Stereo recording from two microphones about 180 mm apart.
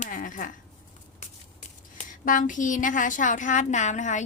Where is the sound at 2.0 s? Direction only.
45° left (ahead or behind).